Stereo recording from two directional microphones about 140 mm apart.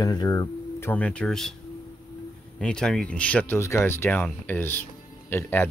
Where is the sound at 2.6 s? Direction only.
5° left (ahead or behind).